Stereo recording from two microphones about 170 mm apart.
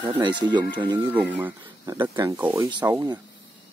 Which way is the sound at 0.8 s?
10° right (ahead or behind).